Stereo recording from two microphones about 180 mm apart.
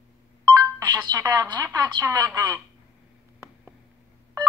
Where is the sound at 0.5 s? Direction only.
20° right (ahead or behind).